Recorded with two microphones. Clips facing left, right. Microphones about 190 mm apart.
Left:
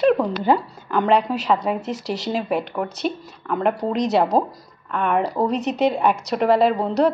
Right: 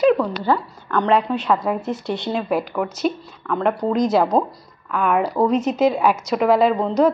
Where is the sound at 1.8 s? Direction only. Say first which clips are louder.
Right 2 dB; 90° left.